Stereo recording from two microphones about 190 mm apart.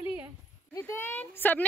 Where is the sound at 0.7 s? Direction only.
15° left (ahead or behind).